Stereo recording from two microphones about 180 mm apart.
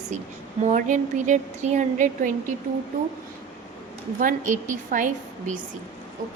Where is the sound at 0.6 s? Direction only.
45° right (ahead or behind).